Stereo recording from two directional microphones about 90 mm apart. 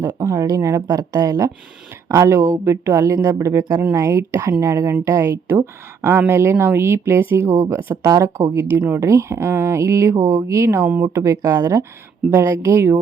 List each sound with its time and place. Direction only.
0.2 s speech: 40° right (ahead or behind)